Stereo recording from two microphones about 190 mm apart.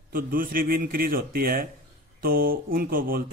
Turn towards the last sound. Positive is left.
turn(degrees=-50)  # may be behind; listen again after turning